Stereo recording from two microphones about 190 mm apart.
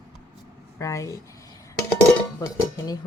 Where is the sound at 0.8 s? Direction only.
15° left (ahead or behind).